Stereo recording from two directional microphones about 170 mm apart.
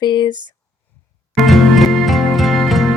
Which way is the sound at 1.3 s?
Centre (ahead or behind).